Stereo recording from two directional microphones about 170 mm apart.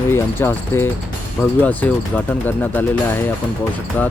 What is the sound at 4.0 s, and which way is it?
Speech, 10° left (ahead or behind).